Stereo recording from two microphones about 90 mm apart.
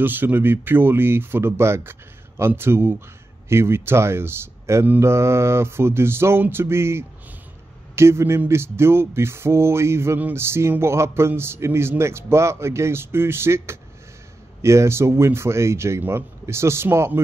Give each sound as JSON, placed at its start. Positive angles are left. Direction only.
{"t": 0.0, "sound": "a man's voice", "side_deg": -20}